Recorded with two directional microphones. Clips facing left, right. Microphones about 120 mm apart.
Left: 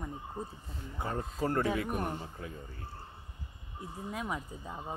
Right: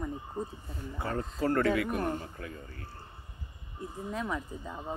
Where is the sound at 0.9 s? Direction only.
15° left (ahead or behind).